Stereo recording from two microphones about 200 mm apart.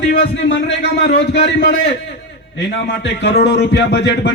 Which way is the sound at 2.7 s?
60° left (ahead or behind).